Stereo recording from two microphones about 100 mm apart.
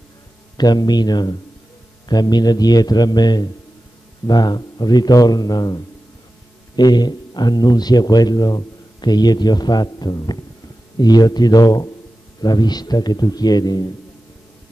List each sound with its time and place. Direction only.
0.6 s speech: 45° left (ahead or behind)
6.8 s speech: 45° left (ahead or behind)